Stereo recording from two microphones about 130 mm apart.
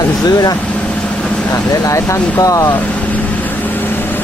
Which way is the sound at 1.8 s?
25° left (ahead or behind).